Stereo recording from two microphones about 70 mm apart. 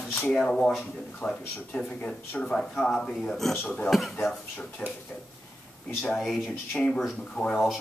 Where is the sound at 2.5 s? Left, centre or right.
Centre.